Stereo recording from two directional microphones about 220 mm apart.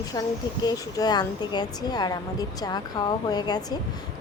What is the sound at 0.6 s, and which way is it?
A woman's voice, 20° left (ahead or behind).